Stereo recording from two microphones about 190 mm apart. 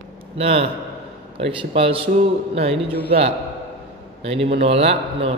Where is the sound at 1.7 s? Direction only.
30° right (ahead or behind).